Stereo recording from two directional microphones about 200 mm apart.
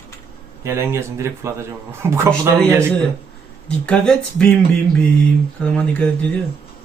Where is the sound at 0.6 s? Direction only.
15° right (ahead or behind).